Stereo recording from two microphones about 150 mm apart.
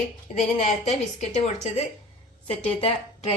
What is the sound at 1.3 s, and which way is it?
Speech, 50° left (ahead or behind).